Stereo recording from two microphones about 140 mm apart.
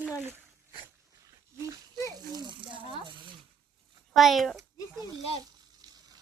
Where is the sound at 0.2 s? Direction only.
15° right (ahead or behind).